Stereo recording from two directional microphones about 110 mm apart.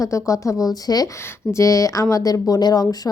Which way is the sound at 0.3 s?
30° left (ahead or behind).